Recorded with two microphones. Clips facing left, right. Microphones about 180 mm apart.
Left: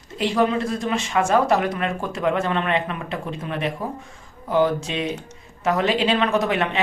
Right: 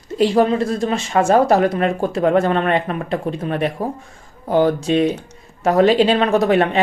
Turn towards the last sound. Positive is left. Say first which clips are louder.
# right 6 dB
turn(degrees=-45)  # may be behind; listen again after turning